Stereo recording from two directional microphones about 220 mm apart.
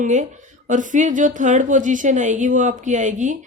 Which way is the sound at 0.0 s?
35° right (ahead or behind).